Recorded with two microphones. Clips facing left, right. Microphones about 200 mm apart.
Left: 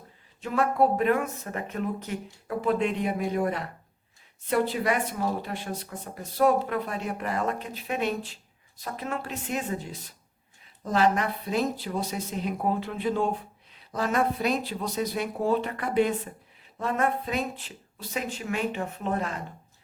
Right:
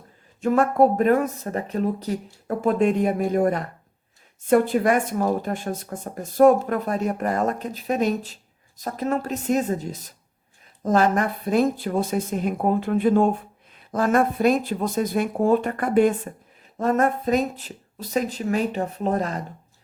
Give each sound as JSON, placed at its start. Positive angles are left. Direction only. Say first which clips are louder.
{"t": 0.4, "sound": "speech", "louder": "right 6 dB", "side_deg": -45}